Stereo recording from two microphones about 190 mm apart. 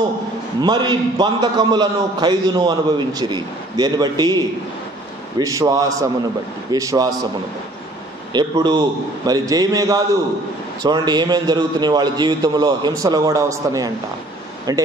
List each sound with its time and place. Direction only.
0.6 s a man's voice: 20° right (ahead or behind)
5.4 s a man's voice: 15° right (ahead or behind)
8.3 s a man's voice: 20° right (ahead or behind)